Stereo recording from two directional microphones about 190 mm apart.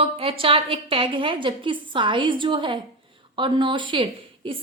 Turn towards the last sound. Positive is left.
turn(degrees=-30)  # may be behind; listen again after turning